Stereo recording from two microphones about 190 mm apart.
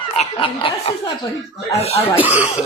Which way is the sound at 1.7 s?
35° left (ahead or behind).